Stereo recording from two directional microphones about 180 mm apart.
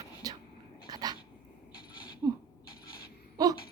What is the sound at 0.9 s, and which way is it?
Dog, 20° right (ahead or behind).